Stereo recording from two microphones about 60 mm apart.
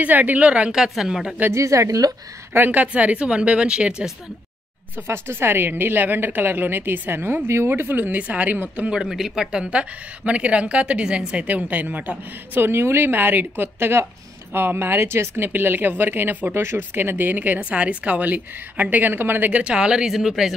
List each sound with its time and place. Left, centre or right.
0.0 s a woman's voice: right
0.7 s speech: centre
1.5 s a woman's voice: right
2.5 s a woman's voice: right
4.9 s a woman's voice: right
12.6 s speech: right
19.6 s speech: centre